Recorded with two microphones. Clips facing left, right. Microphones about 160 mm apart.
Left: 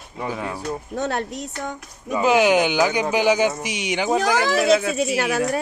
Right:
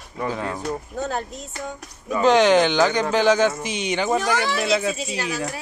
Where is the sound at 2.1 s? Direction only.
10° left (ahead or behind).